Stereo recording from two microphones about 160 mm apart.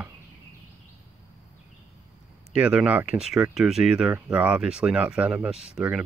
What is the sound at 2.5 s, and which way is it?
Speech, 10° right (ahead or behind).